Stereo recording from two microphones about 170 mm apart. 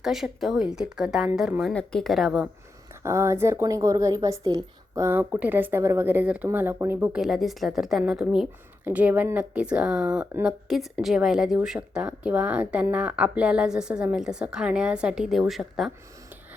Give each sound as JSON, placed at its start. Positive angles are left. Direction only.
{"t": 0.0, "sound": "a woman's voice", "side_deg": 0}
{"t": 3.0, "sound": "speech", "side_deg": -15}
{"t": 7.2, "sound": "a woman's voice", "side_deg": 0}